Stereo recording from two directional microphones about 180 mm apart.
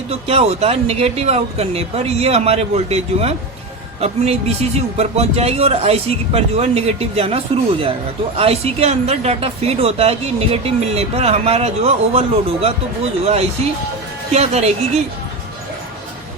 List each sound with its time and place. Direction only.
0.1 s speech: 35° right (ahead or behind)